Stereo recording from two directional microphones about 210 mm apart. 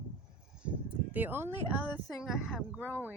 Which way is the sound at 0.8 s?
10° right (ahead or behind).